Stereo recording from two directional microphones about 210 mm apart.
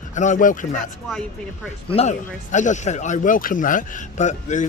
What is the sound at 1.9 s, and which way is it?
Speech, 30° left (ahead or behind).